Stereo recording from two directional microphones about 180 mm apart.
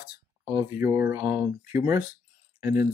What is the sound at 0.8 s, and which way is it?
Speech, 15° right (ahead or behind).